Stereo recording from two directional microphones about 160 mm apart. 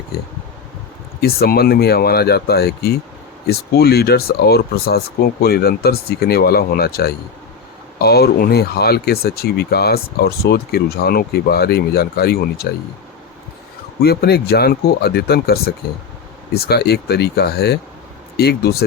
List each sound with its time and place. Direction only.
1.2 s speech: 75° left (ahead or behind)
14.0 s speech: 85° left